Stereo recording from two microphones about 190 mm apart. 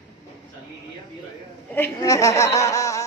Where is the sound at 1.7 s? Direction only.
15° left (ahead or behind).